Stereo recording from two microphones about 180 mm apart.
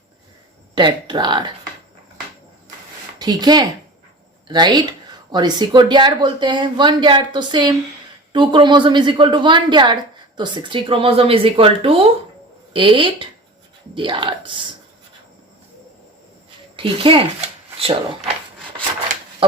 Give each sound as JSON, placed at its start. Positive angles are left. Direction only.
{"t": 0.8, "sound": "a woman's voice", "side_deg": -25}
{"t": 3.2, "sound": "a woman's voice", "side_deg": -25}
{"t": 16.7, "sound": "a woman's voice", "side_deg": -30}
{"t": 19.4, "sound": "a sound", "side_deg": -30}